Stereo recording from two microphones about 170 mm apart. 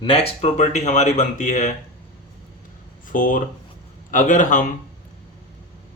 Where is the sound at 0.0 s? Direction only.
35° left (ahead or behind).